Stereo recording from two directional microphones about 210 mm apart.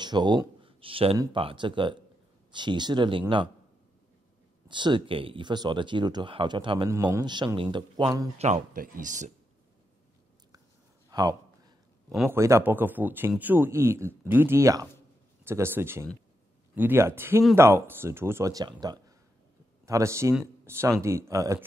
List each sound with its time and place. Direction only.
0.0 s speech: 20° right (ahead or behind)
4.6 s speech: 20° right (ahead or behind)
8.4 s speech: 35° right (ahead or behind)
11.1 s a sound: 20° right (ahead or behind)
12.1 s speech: centre (ahead or behind)
12.4 s a man's voice: 15° right (ahead or behind)